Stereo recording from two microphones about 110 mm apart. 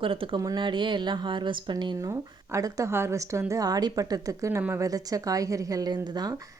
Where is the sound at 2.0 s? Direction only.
30° right (ahead or behind).